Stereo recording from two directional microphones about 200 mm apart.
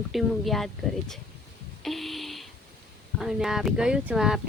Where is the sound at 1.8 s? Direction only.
Centre (ahead or behind).